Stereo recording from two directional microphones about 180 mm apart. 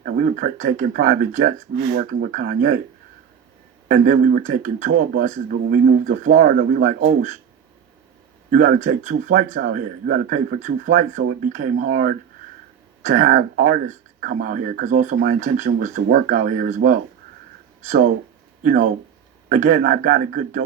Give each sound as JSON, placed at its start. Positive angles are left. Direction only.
{"t": 0.0, "sound": "a man's voice", "side_deg": -50}
{"t": 3.8, "sound": "a man's voice", "side_deg": -50}
{"t": 5.6, "sound": "a man's voice", "side_deg": -60}
{"t": 8.4, "sound": "a man's voice", "side_deg": -50}
{"t": 13.0, "sound": "a man's voice", "side_deg": -45}
{"t": 15.1, "sound": "a man's voice", "side_deg": -55}